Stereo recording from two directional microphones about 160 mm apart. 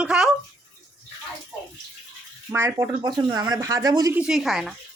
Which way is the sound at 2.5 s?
15° right (ahead or behind).